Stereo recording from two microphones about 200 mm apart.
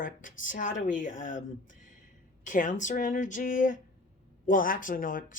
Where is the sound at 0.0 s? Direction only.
40° left (ahead or behind).